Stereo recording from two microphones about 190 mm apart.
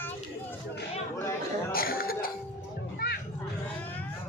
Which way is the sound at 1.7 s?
50° left (ahead or behind).